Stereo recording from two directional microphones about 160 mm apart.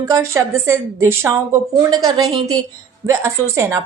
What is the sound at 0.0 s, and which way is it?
A woman's voice, 20° right (ahead or behind).